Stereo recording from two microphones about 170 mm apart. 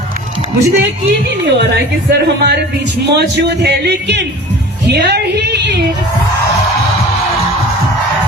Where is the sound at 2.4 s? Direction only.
75° right (ahead or behind).